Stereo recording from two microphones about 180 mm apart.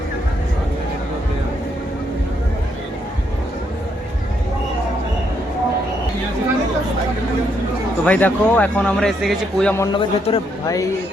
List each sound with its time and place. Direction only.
8.0 s speech: 10° left (ahead or behind)
9.7 s a man's voice: 20° left (ahead or behind)